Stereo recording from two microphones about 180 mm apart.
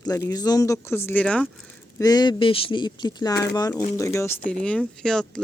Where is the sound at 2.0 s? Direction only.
20° left (ahead or behind); by 5.4 s 5° left (ahead or behind).